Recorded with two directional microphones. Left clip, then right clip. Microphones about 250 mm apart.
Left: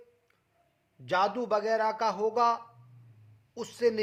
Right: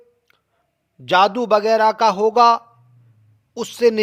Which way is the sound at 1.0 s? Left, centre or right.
Right.